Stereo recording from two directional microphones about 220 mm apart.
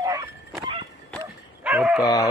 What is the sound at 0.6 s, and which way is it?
Dog, 20° right (ahead or behind).